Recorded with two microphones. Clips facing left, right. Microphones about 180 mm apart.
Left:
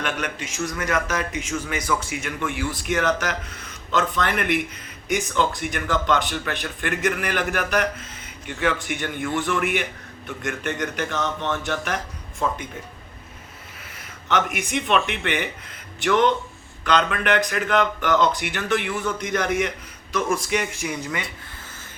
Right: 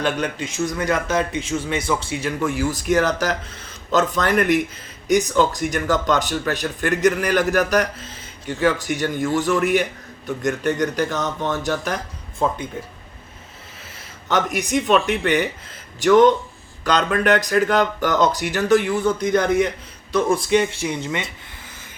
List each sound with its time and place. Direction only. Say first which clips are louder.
0.0 s a man's voice: right 5 dB; 30° right (ahead or behind)
14.3 s a man's voice: right 3 dB; 35° right (ahead or behind)